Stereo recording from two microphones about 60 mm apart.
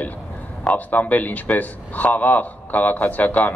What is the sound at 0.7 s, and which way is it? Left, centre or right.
Speech, left.